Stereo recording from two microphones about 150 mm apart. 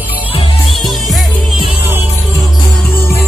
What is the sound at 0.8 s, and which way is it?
Music, centre (ahead or behind).